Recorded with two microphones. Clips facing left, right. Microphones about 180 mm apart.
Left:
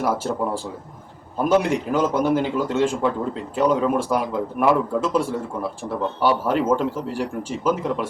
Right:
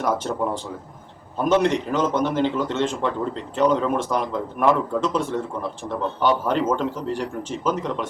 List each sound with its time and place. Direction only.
0.0 s a man's voice: 5° left (ahead or behind)
6.2 s a man's voice: 5° left (ahead or behind)